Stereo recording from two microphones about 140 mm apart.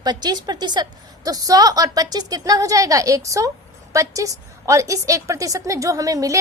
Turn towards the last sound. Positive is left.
turn(degrees=-25)  # may be behind; listen again after turning